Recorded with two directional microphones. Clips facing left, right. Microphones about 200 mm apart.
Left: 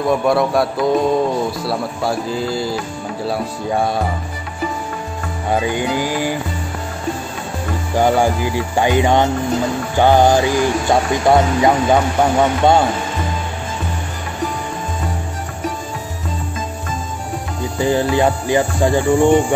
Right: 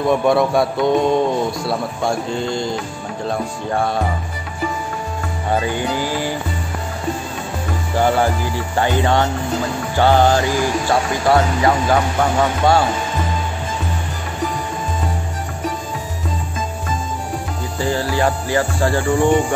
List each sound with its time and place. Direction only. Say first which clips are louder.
0.0 s a man's voice: even; centre (ahead or behind)
5.5 s speech: left 2 dB; 15° left (ahead or behind)
7.9 s speech: left 2 dB; 15° left (ahead or behind)
17.7 s speech: left 4 dB; 20° left (ahead or behind)